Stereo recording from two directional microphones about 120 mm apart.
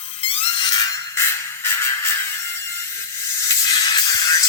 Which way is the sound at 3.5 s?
30° left (ahead or behind).